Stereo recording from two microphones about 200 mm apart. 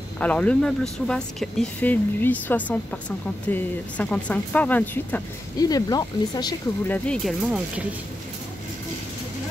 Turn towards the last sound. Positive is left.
turn(degrees=0)  # may be behind; listen again after turning